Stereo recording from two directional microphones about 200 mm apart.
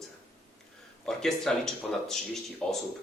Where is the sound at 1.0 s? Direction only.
Centre (ahead or behind).